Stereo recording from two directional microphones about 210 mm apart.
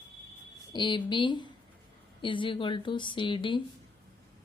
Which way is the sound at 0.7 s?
20° left (ahead or behind).